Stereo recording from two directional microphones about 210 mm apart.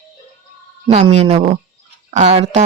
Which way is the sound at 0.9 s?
30° right (ahead or behind).